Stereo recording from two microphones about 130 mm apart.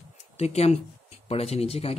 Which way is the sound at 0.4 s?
55° left (ahead or behind).